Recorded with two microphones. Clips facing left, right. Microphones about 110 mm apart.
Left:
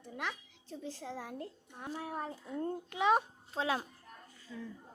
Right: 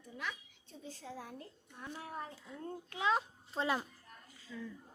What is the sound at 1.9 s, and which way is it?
Speech, 55° left (ahead or behind).